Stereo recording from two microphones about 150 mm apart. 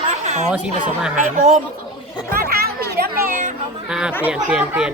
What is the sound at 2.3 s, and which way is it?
Children playing, 90° right.